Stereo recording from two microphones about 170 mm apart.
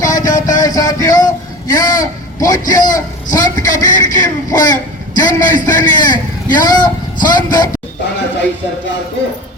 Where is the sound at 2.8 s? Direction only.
20° left (ahead or behind).